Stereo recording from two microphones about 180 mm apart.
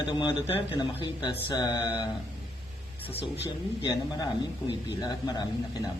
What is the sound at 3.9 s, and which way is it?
Speech, 20° left (ahead or behind).